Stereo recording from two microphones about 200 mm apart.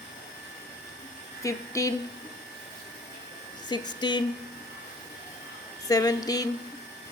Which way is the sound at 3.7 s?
20° left (ahead or behind).